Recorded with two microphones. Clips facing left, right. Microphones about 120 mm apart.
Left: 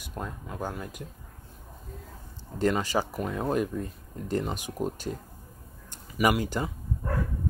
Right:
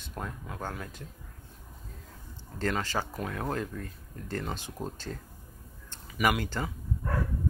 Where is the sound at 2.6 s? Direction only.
15° left (ahead or behind).